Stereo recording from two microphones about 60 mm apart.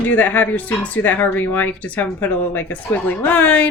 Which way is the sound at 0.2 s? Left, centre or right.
Left.